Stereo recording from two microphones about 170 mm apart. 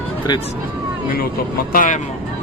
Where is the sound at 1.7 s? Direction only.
50° left (ahead or behind).